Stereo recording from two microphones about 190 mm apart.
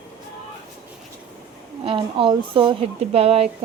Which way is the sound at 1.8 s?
30° right (ahead or behind).